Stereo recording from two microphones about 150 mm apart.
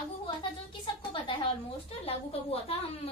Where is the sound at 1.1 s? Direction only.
35° left (ahead or behind).